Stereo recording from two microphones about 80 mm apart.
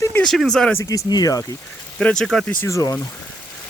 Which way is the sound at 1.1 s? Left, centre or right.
Left.